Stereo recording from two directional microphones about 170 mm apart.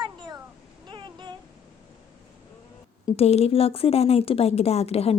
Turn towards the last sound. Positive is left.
turn(degrees=35)  # may be behind; listen again after turning